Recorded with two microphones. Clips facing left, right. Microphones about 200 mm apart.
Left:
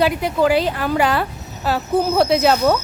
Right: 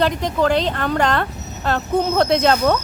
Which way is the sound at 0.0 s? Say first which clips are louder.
Left 1 dB; 10° left (ahead or behind).